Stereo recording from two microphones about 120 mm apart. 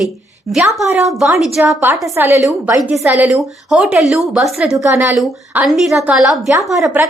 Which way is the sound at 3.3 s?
5° right (ahead or behind).